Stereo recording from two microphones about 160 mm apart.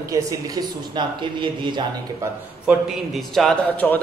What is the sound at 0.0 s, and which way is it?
A man's voice, 20° right (ahead or behind).